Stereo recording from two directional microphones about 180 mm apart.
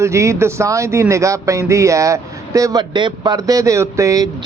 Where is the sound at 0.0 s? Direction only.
15° right (ahead or behind).